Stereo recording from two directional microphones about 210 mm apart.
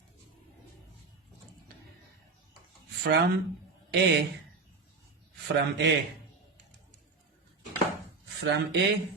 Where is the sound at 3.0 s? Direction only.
50° right (ahead or behind).